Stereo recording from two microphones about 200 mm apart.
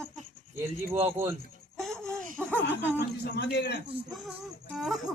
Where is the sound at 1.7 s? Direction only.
Centre (ahead or behind).